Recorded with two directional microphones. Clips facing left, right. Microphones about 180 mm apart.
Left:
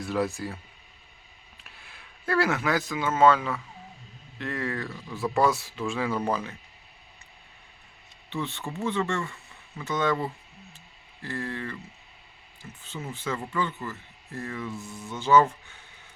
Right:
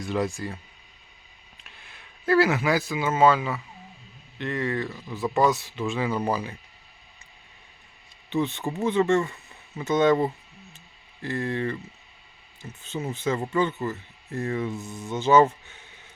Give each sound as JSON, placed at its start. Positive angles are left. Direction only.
{"t": 0.0, "sound": "speech", "side_deg": 5}
{"t": 1.6, "sound": "speech", "side_deg": 0}
{"t": 8.3, "sound": "speech", "side_deg": -15}
{"t": 12.9, "sound": "speech", "side_deg": -25}